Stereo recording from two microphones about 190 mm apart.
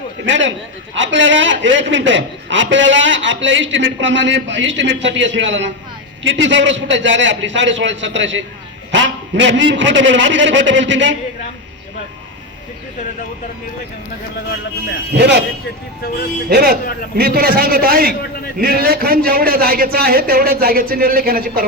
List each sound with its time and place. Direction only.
0.3 s a man's voice: 75° right (ahead or behind)
15.1 s speech: 65° right (ahead or behind)
16.5 s a man's voice: 55° right (ahead or behind)